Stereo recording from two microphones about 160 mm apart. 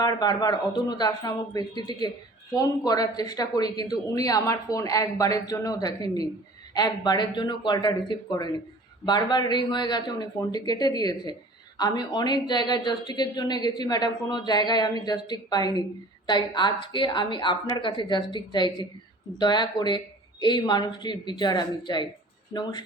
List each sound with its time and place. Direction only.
0.0 s speech: 25° left (ahead or behind)